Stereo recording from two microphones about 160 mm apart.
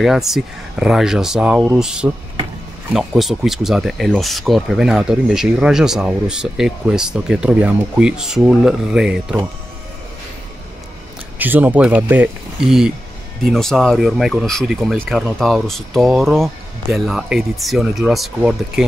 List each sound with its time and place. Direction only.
0.0 s speech: centre (ahead or behind)
11.3 s speech: 10° right (ahead or behind)